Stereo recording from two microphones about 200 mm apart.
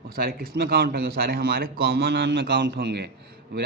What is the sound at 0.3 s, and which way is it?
A man's voice, 50° right (ahead or behind).